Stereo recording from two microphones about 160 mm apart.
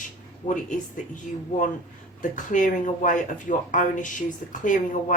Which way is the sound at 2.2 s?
55° left (ahead or behind).